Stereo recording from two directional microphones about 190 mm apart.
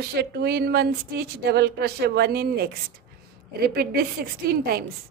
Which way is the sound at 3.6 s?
55° right (ahead or behind).